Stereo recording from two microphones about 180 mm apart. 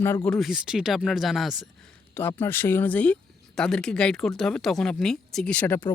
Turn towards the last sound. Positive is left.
turn(degrees=10)  # may be behind; listen again after turning